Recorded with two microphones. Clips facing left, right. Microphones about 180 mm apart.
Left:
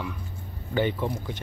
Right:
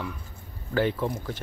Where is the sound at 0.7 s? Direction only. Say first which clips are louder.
Even; centre (ahead or behind).